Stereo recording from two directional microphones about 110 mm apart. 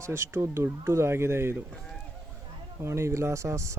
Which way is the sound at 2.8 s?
25° right (ahead or behind).